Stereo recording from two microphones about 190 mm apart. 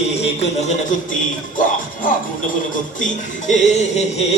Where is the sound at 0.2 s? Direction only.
35° left (ahead or behind).